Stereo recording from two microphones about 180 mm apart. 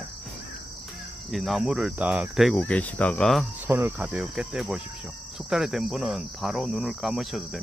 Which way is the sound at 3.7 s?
10° right (ahead or behind).